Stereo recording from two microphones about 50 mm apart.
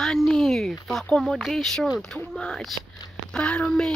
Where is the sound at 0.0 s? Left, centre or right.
Centre.